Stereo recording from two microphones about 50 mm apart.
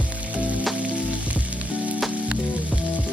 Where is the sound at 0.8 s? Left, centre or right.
Right.